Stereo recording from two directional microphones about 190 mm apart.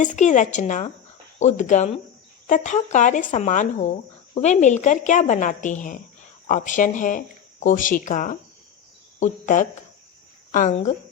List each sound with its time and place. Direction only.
0.0 s speech: 40° left (ahead or behind)